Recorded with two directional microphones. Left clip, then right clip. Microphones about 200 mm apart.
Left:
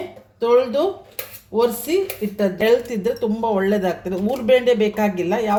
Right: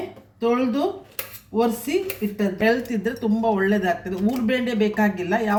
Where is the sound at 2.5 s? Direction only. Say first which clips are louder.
Left 4 dB; 40° left (ahead or behind).